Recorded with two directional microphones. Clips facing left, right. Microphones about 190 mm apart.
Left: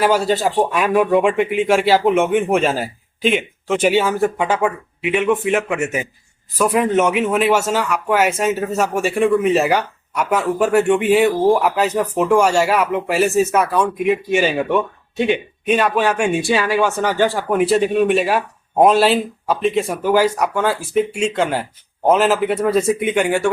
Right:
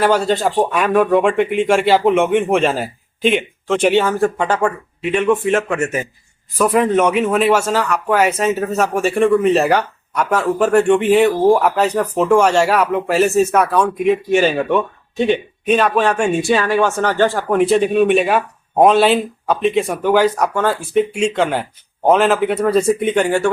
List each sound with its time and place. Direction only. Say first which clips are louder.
0.0 s speech: right 1 dB; 5° left (ahead or behind)
6.6 s speech: right 2 dB; centre (ahead or behind)